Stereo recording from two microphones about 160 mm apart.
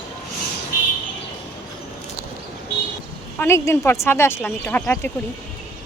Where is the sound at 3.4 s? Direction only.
15° left (ahead or behind).